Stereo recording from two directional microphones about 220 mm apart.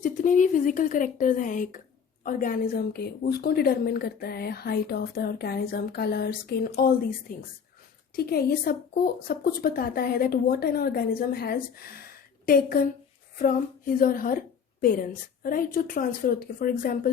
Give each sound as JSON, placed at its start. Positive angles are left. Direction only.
{"t": 0.0, "sound": "a woman's voice", "side_deg": 35}